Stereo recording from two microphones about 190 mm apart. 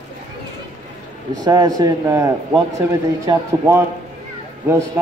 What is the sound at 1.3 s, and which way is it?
A man's voice, 20° right (ahead or behind).